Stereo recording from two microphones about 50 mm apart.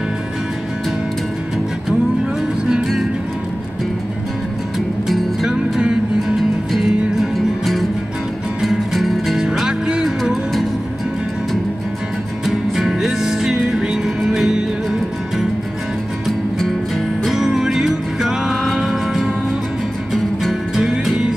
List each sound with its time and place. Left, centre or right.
4.7 s music: centre
5.8 s music: centre
7.2 s music: centre
9.5 s music: centre
12.4 s music: centre
16.3 s music: centre
17.3 s music: centre
20.7 s music: centre